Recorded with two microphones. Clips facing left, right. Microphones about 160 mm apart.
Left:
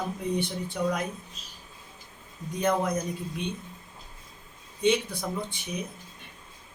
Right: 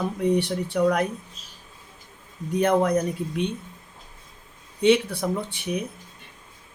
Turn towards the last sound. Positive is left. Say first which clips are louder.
# right 6 dB
turn(degrees=-65)  # may be behind; listen again after turning